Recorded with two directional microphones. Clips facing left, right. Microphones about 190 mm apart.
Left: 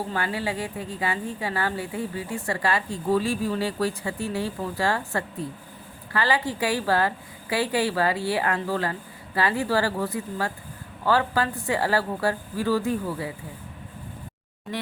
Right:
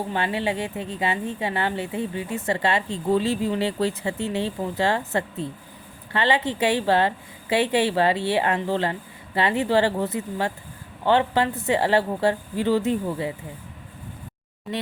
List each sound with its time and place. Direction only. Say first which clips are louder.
0.1 s a woman's voice: right 3 dB; 20° right (ahead or behind)